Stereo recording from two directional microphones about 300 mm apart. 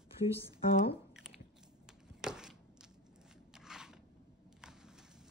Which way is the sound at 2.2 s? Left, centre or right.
Centre.